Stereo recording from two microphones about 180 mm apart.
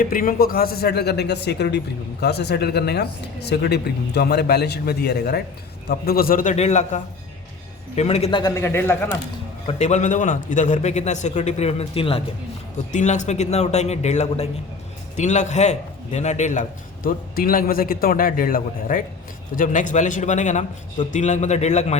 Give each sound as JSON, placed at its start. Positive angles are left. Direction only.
{"t": 0.0, "sound": "a man's voice", "side_deg": 50}
{"t": 9.6, "sound": "a man's voice", "side_deg": 40}
{"t": 12.9, "sound": "a man's voice", "side_deg": 40}